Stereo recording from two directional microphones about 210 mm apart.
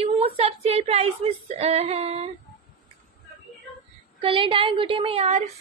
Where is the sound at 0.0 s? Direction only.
30° right (ahead or behind).